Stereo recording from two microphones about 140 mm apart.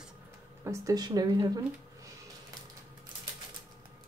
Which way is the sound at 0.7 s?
25° right (ahead or behind).